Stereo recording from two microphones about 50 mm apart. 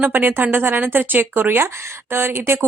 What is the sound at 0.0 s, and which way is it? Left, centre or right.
A woman's voice, right.